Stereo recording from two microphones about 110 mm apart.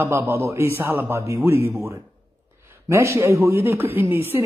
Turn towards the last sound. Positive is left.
turn(degrees=-20)  # may be behind; listen again after turning